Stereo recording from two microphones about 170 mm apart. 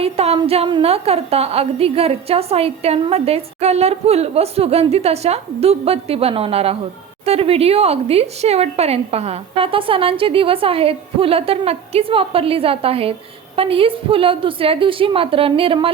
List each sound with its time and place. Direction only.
0.0 s a woman's voice: 35° right (ahead or behind)